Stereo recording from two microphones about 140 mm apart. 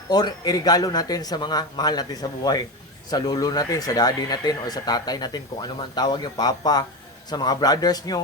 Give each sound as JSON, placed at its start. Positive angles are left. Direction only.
{"t": 0.1, "sound": "speech", "side_deg": 30}